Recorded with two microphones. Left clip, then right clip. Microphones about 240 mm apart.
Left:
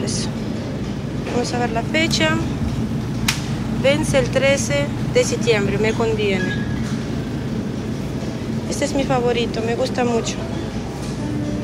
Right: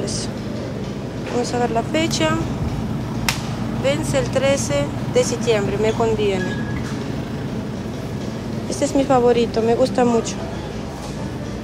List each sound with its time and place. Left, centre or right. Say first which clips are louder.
1.4 s speech: right 2 dB; centre
3.8 s speech: left 3 dB; centre
8.8 s speech: right 4 dB; centre